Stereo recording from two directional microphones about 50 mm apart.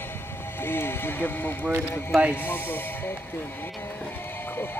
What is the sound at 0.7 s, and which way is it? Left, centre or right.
Speech, left.